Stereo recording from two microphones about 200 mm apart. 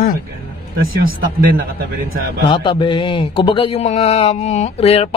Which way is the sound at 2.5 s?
25° left (ahead or behind).